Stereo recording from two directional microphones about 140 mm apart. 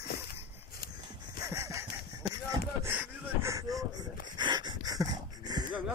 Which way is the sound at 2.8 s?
15° right (ahead or behind).